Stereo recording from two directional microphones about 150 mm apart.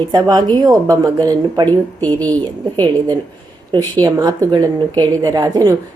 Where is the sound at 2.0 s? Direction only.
10° left (ahead or behind).